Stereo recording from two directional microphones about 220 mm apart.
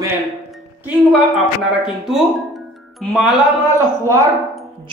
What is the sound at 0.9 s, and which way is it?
Speech, 5° right (ahead or behind).